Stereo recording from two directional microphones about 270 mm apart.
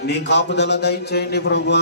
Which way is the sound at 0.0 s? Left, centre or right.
Left.